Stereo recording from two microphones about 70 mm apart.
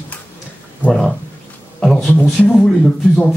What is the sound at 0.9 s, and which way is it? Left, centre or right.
Speech, centre.